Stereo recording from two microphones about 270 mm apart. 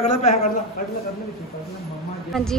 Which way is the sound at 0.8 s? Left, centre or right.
Left.